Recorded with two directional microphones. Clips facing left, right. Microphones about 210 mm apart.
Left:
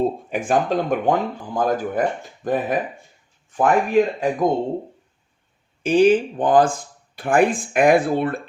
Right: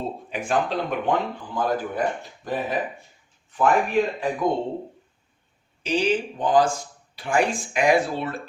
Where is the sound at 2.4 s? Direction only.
50° left (ahead or behind).